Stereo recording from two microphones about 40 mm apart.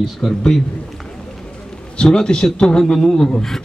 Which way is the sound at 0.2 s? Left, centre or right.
Centre.